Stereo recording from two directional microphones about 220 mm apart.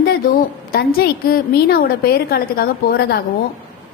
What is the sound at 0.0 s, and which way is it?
A woman's voice, 45° left (ahead or behind).